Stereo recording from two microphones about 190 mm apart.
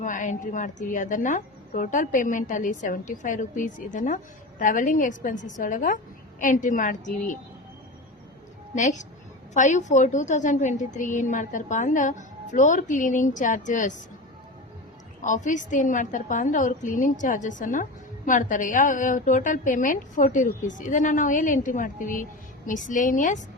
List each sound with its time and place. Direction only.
0.0 s a woman's voice: 40° left (ahead or behind)
8.7 s a woman's voice: 40° left (ahead or behind)
15.2 s a woman's voice: 40° left (ahead or behind)